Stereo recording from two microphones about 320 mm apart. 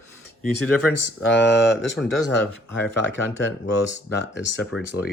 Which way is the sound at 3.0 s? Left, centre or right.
Left.